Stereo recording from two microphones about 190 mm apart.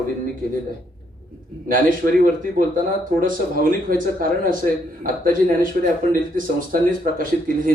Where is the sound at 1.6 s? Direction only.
45° right (ahead or behind).